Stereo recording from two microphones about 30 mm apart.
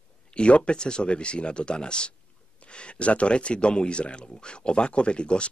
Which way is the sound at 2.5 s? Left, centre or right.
Left.